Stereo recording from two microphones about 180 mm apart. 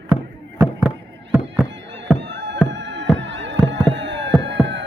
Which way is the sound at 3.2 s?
85° right.